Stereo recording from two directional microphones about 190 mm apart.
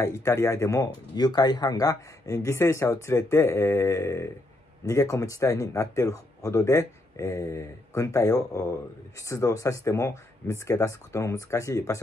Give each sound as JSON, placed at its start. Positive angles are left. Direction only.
{"t": 0.0, "sound": "speech", "side_deg": 15}